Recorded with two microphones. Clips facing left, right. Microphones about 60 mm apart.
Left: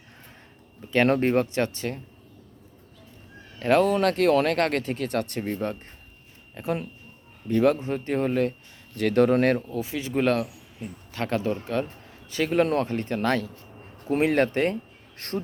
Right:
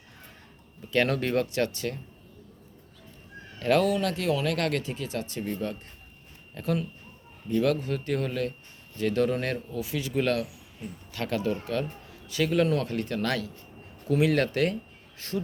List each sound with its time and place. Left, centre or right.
0.9 s speech: left
3.6 s speech: left
3.9 s speech: left
4.5 s speech: left
6.5 s speech: left
9.0 s speech: left
9.7 s a man's voice: left
15.2 s speech: left